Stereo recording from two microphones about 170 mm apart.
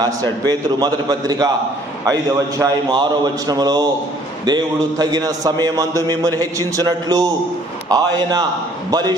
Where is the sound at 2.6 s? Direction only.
25° right (ahead or behind).